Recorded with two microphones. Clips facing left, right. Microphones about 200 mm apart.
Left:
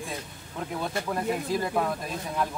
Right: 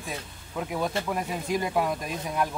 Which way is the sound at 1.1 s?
15° right (ahead or behind).